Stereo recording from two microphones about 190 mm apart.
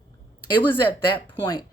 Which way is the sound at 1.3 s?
25° left (ahead or behind).